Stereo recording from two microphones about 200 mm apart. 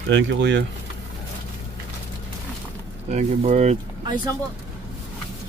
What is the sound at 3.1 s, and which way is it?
Speech, 35° right (ahead or behind).